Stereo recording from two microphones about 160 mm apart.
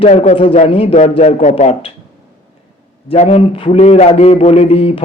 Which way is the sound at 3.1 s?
35° left (ahead or behind).